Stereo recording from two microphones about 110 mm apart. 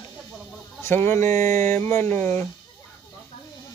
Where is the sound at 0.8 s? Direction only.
20° left (ahead or behind).